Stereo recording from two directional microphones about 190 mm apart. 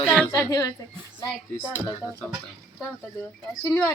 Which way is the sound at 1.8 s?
15° left (ahead or behind).